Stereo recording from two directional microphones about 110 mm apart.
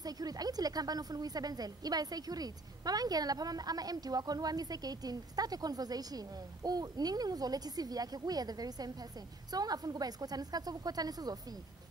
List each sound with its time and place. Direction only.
0.0 s a woman's voice: 35° right (ahead or behind)